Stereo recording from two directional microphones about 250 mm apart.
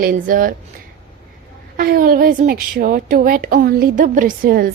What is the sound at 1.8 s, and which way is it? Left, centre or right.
A woman's voice, right.